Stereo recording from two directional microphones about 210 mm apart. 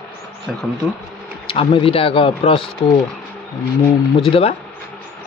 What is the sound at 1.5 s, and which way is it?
A man's voice, 25° left (ahead or behind).